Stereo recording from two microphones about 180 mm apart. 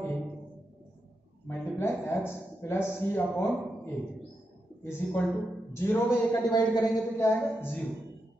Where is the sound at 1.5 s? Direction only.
15° left (ahead or behind).